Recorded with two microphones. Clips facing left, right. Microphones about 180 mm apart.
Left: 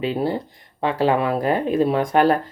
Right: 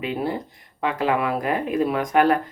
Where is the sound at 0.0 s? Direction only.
30° left (ahead or behind).